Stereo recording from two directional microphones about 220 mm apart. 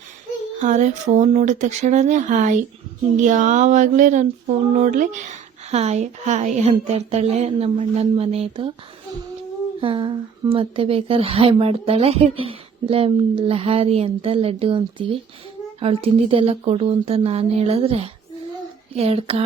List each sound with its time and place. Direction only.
0.6 s a sound: 35° right (ahead or behind)
5.7 s a woman's voice: 30° right (ahead or behind)
9.8 s a woman's voice: 20° right (ahead or behind)